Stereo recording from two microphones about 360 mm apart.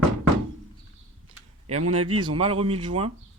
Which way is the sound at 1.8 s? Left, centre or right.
Right.